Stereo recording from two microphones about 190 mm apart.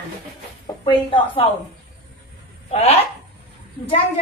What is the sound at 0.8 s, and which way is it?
Speech, 25° left (ahead or behind).